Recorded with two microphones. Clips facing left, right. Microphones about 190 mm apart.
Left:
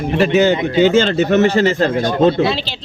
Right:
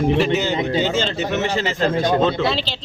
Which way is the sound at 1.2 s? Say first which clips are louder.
Left 9 dB; 50° left (ahead or behind).